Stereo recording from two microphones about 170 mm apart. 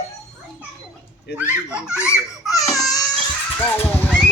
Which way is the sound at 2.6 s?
Centre (ahead or behind).